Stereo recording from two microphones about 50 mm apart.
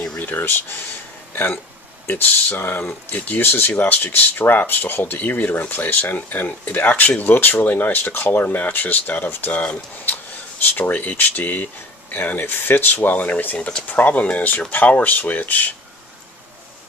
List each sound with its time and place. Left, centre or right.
0.3 s speech: left
3.1 s speech: left
7.3 s speech: left
7.6 s speech: left
10.6 s speech: left